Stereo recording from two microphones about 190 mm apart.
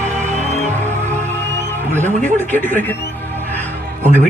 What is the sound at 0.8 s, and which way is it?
Music, 15° right (ahead or behind).